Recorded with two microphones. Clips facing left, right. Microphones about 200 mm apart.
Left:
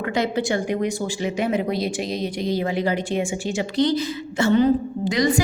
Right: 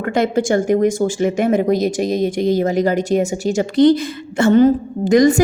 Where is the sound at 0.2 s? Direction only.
45° right (ahead or behind).